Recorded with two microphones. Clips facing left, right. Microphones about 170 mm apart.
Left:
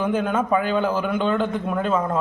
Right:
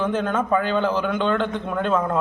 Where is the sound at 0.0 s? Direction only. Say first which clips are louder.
Left 1 dB; 10° left (ahead or behind).